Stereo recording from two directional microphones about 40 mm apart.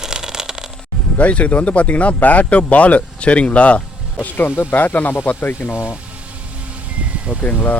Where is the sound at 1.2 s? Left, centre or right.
Left.